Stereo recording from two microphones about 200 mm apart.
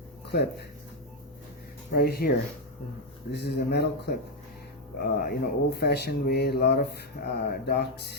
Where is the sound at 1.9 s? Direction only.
50° left (ahead or behind).